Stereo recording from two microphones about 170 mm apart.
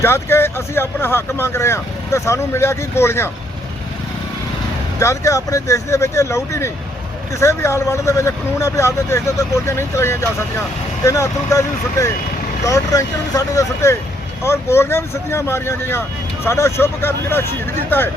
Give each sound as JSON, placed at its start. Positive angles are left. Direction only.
{"t": 0.0, "sound": "speech", "side_deg": 15}
{"t": 4.9, "sound": "speech", "side_deg": 20}